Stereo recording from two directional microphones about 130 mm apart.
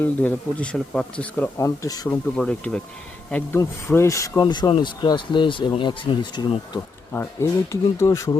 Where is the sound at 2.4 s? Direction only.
10° left (ahead or behind).